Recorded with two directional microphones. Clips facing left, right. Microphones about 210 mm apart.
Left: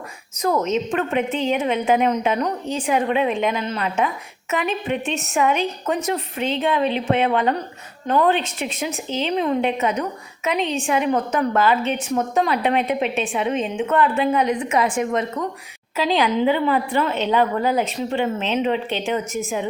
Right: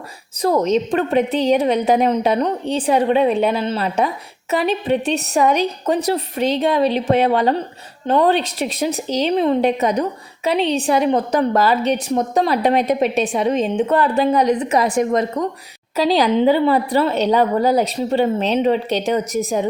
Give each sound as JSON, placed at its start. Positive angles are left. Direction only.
{"t": 0.4, "sound": "a woman's voice", "side_deg": -35}